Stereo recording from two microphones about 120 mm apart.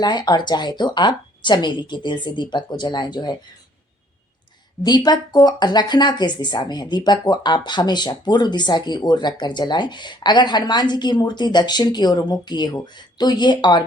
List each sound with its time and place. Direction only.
0.0 s speech: 35° left (ahead or behind)
4.8 s speech: 35° left (ahead or behind)